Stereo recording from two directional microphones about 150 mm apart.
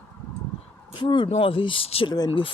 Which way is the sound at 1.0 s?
30° left (ahead or behind).